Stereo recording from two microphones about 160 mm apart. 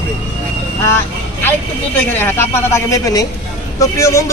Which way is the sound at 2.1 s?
15° left (ahead or behind).